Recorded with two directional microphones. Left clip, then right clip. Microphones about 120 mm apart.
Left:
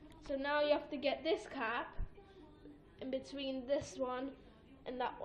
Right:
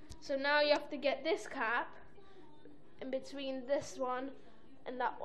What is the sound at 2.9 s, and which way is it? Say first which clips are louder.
A woman's voice: right 1 dB; centre (ahead or behind).